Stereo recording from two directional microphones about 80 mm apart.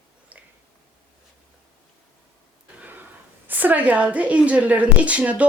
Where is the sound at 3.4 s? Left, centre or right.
Right.